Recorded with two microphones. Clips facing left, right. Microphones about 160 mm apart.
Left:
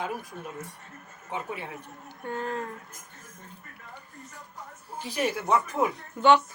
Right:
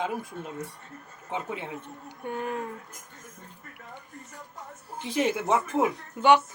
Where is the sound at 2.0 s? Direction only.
15° right (ahead or behind).